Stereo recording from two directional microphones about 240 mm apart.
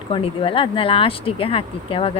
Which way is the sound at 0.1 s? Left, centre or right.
Left.